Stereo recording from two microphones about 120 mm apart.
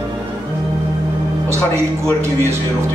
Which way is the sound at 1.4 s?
20° right (ahead or behind).